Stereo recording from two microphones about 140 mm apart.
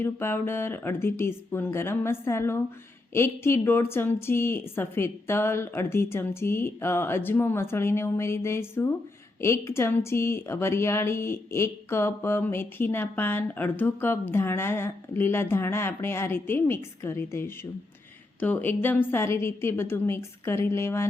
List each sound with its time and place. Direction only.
0.0 s a woman's voice: 15° left (ahead or behind)